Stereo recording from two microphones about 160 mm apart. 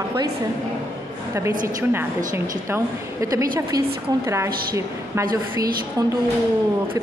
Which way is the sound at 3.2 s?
20° right (ahead or behind).